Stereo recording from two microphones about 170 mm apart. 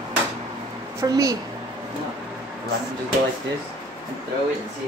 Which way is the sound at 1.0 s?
20° right (ahead or behind).